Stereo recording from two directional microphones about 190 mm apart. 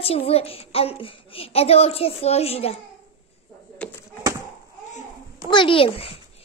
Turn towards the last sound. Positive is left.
turn(degrees=30)  # may be behind; listen again after turning